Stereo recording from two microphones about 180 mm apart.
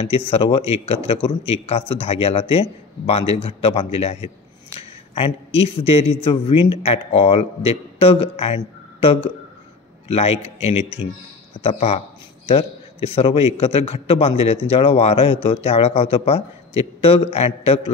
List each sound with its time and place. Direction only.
0.3 s a man's voice: 30° left (ahead or behind)
10.0 s a man's voice: 35° left (ahead or behind)